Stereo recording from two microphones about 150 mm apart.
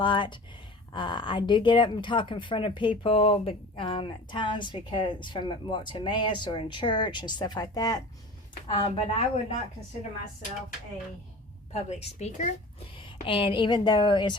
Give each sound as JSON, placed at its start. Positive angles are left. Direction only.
{"t": 0.0, "sound": "speech", "side_deg": 35}
{"t": 8.6, "sound": "speech", "side_deg": 35}
{"t": 11.7, "sound": "a woman's voice", "side_deg": 45}
{"t": 13.2, "sound": "speech", "side_deg": 35}